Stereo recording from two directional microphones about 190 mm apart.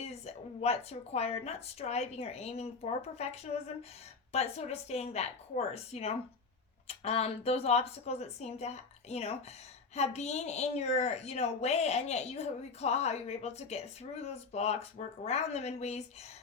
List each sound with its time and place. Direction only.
0.0 s a woman's voice: 35° left (ahead or behind)